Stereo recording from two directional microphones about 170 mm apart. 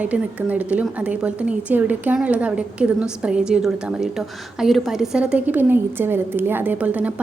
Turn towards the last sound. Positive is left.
turn(degrees=-10)  # may be behind; listen again after turning